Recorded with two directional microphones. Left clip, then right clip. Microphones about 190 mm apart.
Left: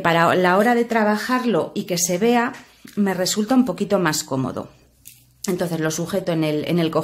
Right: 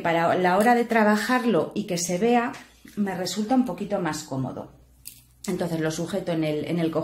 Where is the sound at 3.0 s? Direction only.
35° left (ahead or behind); by 4.5 s 50° left (ahead or behind).